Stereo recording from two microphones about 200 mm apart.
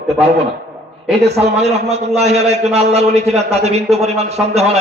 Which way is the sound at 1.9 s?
35° right (ahead or behind).